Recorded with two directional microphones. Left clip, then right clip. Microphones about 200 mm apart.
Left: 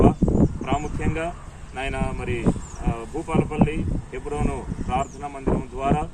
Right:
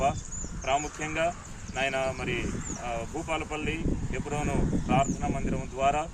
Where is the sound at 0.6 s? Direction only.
20° right (ahead or behind).